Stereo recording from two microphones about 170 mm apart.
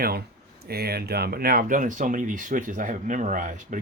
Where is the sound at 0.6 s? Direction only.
65° right (ahead or behind).